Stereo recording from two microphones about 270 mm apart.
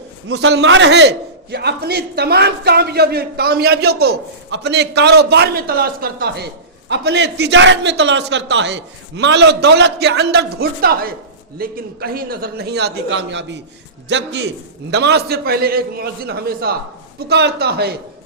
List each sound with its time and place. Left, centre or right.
0.3 s a man's voice: right